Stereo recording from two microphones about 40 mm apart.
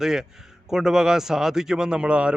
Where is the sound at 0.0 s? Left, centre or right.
Centre.